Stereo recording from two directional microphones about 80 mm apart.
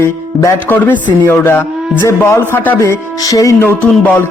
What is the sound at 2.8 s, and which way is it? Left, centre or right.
Music, left.